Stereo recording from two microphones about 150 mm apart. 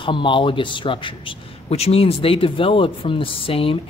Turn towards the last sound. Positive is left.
turn(degrees=35)  # may be behind; listen again after turning